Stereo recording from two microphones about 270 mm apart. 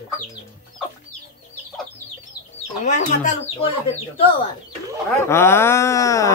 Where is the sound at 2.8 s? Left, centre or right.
Left.